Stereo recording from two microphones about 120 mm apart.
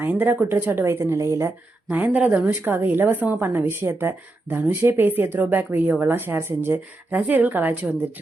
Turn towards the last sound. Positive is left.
turn(degrees=-15)  # may be behind; listen again after turning